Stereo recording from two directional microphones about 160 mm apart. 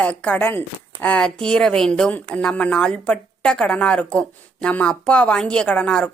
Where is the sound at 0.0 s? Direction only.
10° left (ahead or behind).